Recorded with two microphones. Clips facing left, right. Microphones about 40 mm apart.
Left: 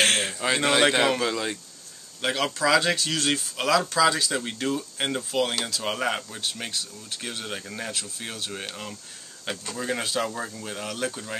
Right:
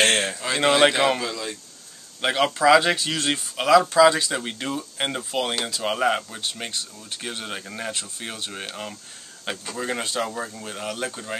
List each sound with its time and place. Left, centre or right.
0.0 s a sound: centre
0.7 s speech: centre
1.2 s speech: centre
2.2 s speech: right